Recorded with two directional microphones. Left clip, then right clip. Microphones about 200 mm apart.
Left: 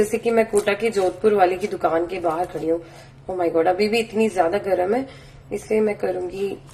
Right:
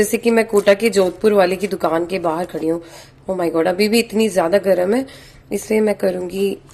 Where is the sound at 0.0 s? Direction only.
35° right (ahead or behind).